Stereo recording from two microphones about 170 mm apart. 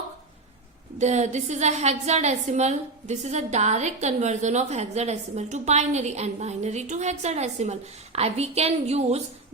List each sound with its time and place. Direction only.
0.9 s a woman's voice: 40° right (ahead or behind)